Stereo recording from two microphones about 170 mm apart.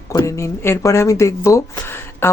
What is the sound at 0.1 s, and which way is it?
Speech, 20° left (ahead or behind).